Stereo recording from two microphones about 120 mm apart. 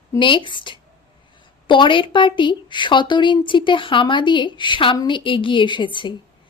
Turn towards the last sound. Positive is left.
turn(degrees=40)  # may be behind; listen again after turning